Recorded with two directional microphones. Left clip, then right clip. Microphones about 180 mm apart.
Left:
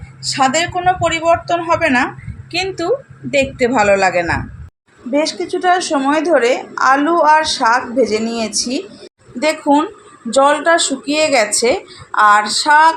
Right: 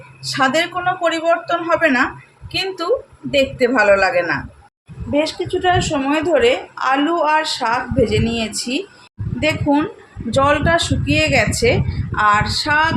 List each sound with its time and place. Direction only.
0.2 s a woman's voice: 15° left (ahead or behind)